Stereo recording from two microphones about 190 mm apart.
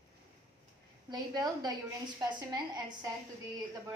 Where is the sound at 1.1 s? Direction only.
20° right (ahead or behind).